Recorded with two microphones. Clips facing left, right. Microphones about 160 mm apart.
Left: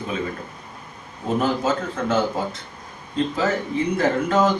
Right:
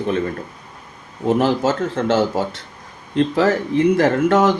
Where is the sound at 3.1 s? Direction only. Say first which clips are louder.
Right 6 dB; 75° right (ahead or behind).